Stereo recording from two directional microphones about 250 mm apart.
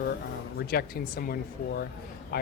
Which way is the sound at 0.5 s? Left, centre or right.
Left.